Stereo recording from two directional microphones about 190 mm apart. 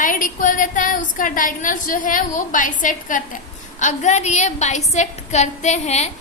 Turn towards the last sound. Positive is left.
turn(degrees=35)  # may be behind; listen again after turning